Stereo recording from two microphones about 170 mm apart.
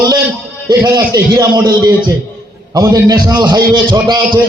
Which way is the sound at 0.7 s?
20° right (ahead or behind).